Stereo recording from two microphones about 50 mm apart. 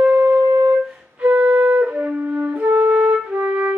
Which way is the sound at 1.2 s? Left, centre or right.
Right.